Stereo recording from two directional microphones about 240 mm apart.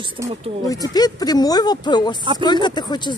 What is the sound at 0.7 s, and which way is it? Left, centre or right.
A woman's voice, centre.